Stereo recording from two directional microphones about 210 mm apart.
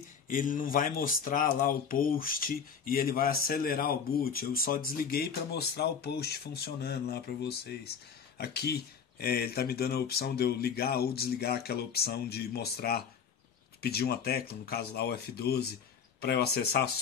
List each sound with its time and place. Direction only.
0.3 s speech: 40° left (ahead or behind)